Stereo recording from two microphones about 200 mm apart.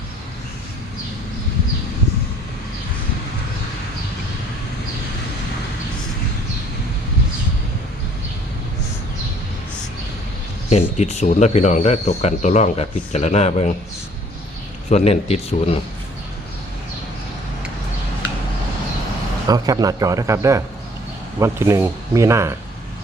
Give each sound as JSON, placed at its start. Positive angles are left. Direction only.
{"t": 10.7, "sound": "speech", "side_deg": 35}
{"t": 14.8, "sound": "speech", "side_deg": 30}
{"t": 19.5, "sound": "speech", "side_deg": -20}